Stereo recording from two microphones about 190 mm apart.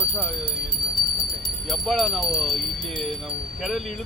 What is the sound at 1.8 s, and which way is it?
Speech, centre (ahead or behind).